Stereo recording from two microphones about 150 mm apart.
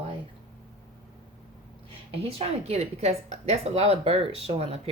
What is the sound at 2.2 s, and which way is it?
Speech, 45° right (ahead or behind).